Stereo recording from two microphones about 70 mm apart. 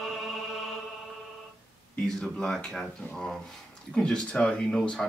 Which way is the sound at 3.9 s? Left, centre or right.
Centre.